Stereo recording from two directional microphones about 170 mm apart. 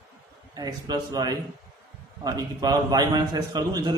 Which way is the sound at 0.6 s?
25° right (ahead or behind).